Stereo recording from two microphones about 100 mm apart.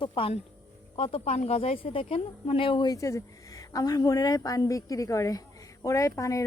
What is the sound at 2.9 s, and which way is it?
Speech, 35° left (ahead or behind).